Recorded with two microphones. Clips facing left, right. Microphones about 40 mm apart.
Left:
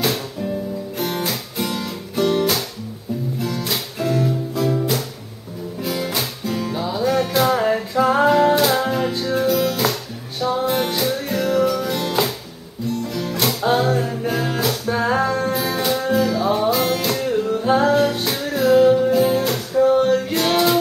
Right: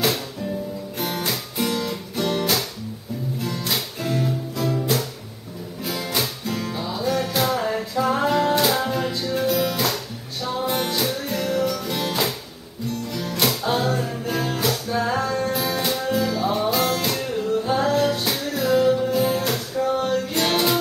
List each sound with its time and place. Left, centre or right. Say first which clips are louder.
0.9 s guitar: left 2 dB; centre
3.3 s music: even; centre
6.1 s music: left 2 dB; centre
13.4 s music: left 3 dB; centre
14.9 s music: left 7 dB; left
15.5 s music: left 3 dB; centre
19.7 s a sound: left 8 dB; centre
20.3 s music: left 3 dB; centre